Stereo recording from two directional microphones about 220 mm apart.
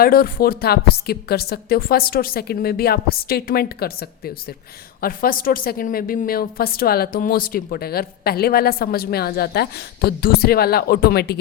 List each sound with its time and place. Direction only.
0.0 s a woman's voice: 40° left (ahead or behind)
4.9 s a woman's voice: 40° left (ahead or behind)